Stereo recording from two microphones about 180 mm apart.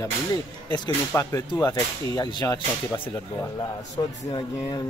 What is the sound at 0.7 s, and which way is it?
Speech, 20° left (ahead or behind).